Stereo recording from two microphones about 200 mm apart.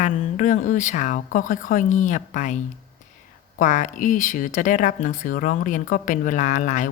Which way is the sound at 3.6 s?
40° left (ahead or behind).